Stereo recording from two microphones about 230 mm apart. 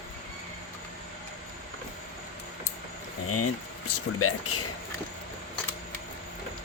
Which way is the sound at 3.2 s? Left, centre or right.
Left.